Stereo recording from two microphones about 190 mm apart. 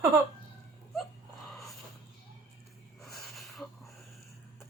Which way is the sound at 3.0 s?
Centre (ahead or behind).